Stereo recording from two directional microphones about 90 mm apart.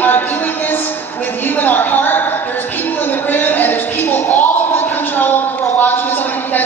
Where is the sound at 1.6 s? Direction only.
20° left (ahead or behind).